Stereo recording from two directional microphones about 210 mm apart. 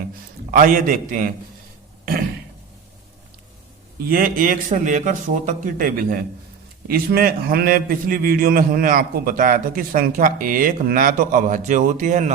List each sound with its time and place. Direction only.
0.5 s speech: 40° right (ahead or behind)
4.0 s a man's voice: 45° right (ahead or behind)